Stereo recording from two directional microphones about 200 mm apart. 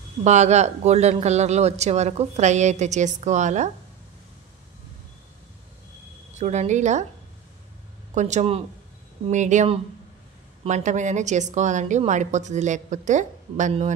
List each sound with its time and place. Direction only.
0.2 s a man's voice: 35° right (ahead or behind)
6.3 s a man's voice: 35° right (ahead or behind)
8.1 s a man's voice: 35° right (ahead or behind)